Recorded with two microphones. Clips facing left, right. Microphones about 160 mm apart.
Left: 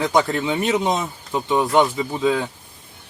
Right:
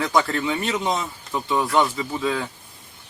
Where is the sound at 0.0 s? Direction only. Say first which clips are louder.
Left 2 dB; 20° left (ahead or behind).